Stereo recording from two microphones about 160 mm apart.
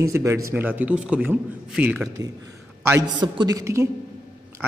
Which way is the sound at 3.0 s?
25° right (ahead or behind).